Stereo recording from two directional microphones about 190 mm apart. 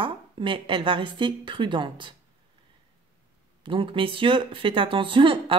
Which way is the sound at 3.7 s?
25° right (ahead or behind).